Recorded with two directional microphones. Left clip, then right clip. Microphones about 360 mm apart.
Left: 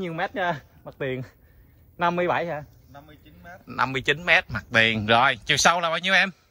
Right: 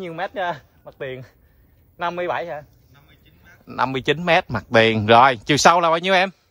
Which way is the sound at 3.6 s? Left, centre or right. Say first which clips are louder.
Right 3 dB; centre.